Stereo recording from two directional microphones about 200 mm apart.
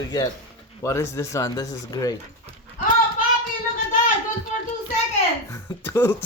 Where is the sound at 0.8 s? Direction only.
15° left (ahead or behind).